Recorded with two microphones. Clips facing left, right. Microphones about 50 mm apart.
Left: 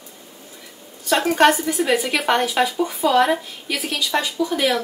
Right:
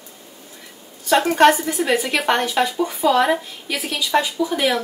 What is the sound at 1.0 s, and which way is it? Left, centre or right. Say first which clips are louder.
Speech: right 2 dB; centre.